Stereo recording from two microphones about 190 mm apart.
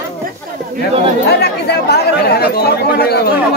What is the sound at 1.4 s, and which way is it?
Speech, 60° left (ahead or behind).